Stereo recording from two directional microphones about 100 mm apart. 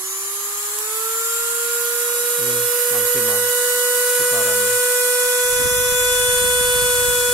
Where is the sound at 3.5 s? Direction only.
35° right (ahead or behind).